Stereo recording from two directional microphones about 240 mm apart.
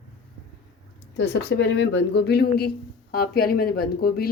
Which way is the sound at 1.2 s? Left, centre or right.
Left.